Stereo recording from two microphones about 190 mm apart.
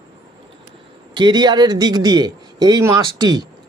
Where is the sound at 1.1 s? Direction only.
25° right (ahead or behind).